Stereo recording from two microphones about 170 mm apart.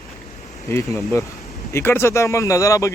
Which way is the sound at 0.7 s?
20° left (ahead or behind).